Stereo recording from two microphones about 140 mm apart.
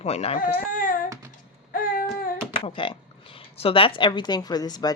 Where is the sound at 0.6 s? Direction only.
75° left (ahead or behind).